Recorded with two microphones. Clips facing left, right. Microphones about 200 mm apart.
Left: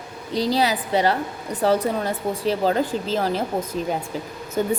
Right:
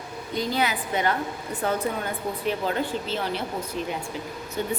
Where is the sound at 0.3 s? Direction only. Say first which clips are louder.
Left 5 dB; 35° left (ahead or behind).